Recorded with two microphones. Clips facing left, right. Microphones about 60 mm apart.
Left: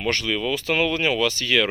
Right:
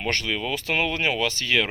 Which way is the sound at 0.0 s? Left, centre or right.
Right.